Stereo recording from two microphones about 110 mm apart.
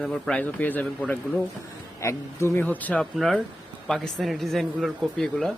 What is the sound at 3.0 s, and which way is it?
Speech, 5° left (ahead or behind).